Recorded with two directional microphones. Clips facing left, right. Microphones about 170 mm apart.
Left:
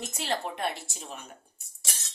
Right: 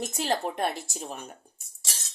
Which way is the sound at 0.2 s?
45° right (ahead or behind).